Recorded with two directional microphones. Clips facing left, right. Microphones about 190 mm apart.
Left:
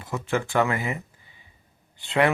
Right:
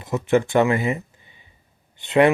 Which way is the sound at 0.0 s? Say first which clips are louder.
Right 8 dB; 20° right (ahead or behind).